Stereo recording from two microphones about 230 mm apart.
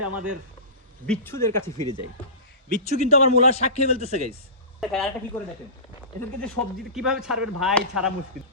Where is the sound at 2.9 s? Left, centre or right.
Left.